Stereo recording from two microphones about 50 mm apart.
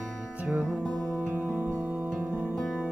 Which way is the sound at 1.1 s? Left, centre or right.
Right.